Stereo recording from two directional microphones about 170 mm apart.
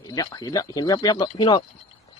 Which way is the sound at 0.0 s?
20° left (ahead or behind).